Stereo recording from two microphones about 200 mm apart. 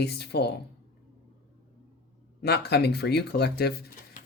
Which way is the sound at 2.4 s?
55° left (ahead or behind).